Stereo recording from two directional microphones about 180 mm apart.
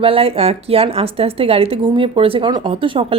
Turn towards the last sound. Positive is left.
turn(degrees=-30)  # may be behind; listen again after turning